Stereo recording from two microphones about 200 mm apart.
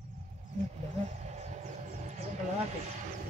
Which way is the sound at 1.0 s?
35° right (ahead or behind).